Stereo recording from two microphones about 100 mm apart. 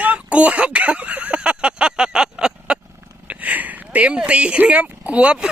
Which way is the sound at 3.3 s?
15° right (ahead or behind).